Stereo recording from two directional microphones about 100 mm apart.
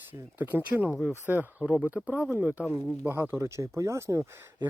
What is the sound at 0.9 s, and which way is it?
Speech, 5° right (ahead or behind).